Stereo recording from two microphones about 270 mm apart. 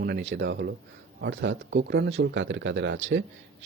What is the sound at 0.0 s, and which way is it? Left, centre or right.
Speech, right.